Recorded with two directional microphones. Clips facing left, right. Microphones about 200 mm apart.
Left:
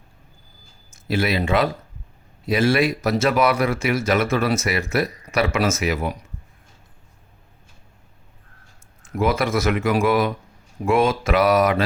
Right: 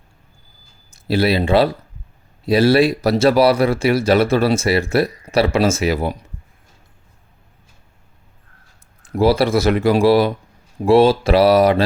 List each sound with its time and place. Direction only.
0.9 s speech: 35° right (ahead or behind)
9.0 s speech: 35° right (ahead or behind)